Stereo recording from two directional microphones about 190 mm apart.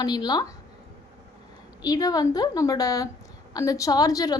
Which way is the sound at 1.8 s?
20° left (ahead or behind).